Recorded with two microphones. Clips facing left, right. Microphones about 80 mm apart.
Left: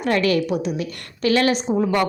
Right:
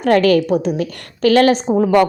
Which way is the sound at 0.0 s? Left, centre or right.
Right.